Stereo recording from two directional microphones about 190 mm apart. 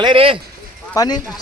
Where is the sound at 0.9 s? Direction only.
20° left (ahead or behind).